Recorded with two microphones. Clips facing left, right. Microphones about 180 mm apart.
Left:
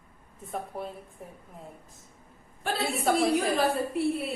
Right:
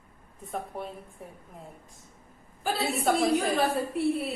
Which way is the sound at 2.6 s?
Centre (ahead or behind).